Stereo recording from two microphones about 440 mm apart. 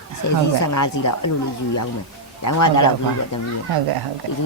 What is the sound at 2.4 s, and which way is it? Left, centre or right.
Speech, left.